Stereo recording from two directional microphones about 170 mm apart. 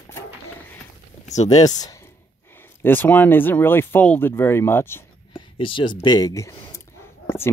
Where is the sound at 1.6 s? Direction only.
20° left (ahead or behind).